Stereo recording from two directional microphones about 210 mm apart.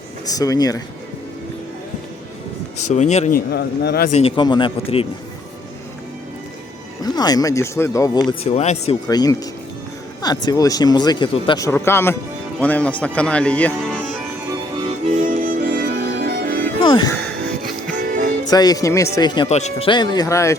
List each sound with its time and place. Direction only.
0.3 s speech: 15° left (ahead or behind)
2.9 s speech: 35° left (ahead or behind); by 4.1 s 50° left (ahead or behind)
4.1 s speech: 25° left (ahead or behind)
7.0 s speech: 20° left (ahead or behind)
8.3 s speech: 30° left (ahead or behind)
9.0 s speech: 20° left (ahead or behind)
15.1 s music: 40° right (ahead or behind)
16.8 s speech: 20° left (ahead or behind)
17.9 s music: 40° right (ahead or behind)
18.4 s speech: 20° left (ahead or behind)
19.5 s speech: 30° left (ahead or behind); by 20.6 s 15° left (ahead or behind)